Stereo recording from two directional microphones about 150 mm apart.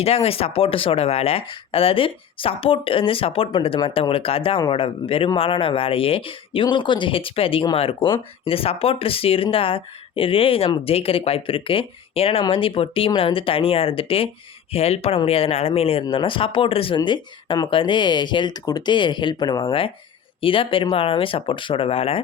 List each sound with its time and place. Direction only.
0.0 s speech: 40° left (ahead or behind)